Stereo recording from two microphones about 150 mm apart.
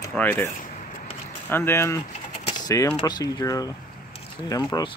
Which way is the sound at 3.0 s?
25° left (ahead or behind).